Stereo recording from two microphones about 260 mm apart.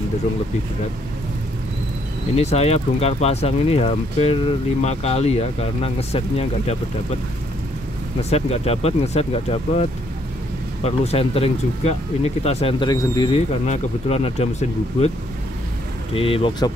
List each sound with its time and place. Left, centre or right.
2.3 s speech: left
8.2 s speech: left
16.2 s speech: left